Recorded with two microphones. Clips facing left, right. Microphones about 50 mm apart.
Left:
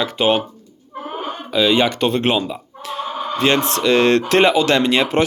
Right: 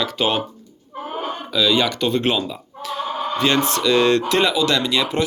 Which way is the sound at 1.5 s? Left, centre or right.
Left.